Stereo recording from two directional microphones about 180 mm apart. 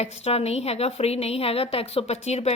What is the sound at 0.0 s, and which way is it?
Speech, 35° left (ahead or behind).